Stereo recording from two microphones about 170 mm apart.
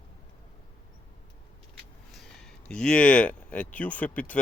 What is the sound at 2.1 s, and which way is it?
Speech, centre (ahead or behind).